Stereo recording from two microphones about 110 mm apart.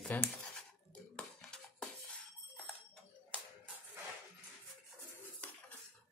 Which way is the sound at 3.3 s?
10° left (ahead or behind).